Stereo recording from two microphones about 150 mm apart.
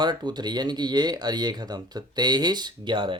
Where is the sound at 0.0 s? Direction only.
30° right (ahead or behind).